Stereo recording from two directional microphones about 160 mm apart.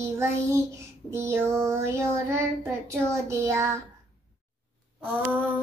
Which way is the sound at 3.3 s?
15° right (ahead or behind).